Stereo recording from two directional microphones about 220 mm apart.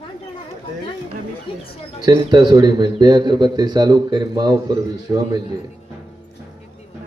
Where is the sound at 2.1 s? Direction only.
20° right (ahead or behind).